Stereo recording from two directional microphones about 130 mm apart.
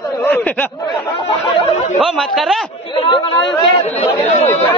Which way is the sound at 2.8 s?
40° left (ahead or behind).